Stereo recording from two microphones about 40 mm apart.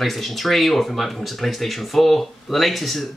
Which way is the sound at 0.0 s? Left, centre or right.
Centre.